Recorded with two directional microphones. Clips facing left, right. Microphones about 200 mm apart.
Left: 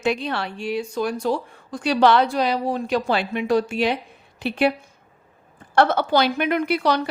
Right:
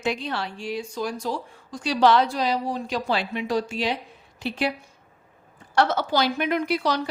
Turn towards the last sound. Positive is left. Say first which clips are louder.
# left 3 dB
turn(degrees=60)  # may be behind; listen again after turning